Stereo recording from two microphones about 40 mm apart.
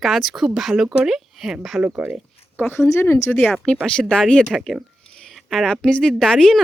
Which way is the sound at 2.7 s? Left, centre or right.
Left.